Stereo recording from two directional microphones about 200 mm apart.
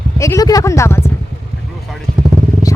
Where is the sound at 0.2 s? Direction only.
15° left (ahead or behind).